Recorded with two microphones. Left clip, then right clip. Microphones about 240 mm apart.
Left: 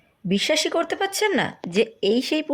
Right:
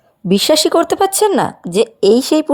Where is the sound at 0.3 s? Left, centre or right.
Right.